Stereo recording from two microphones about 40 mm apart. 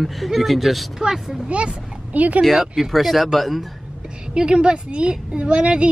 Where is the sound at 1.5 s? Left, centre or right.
Right.